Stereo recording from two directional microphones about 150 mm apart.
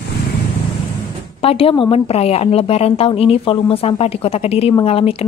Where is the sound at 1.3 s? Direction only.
40° left (ahead or behind).